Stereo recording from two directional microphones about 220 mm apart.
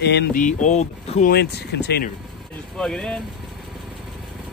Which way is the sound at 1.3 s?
50° left (ahead or behind).